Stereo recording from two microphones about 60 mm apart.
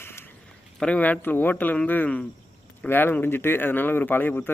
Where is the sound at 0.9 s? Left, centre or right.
Left.